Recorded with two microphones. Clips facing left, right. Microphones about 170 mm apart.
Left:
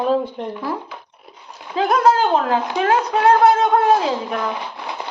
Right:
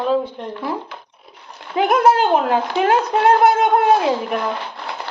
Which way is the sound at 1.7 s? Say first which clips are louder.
Right 1 dB; 20° right (ahead or behind).